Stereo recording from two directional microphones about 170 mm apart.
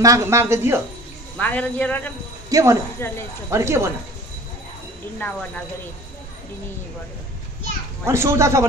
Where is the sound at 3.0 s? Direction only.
15° left (ahead or behind).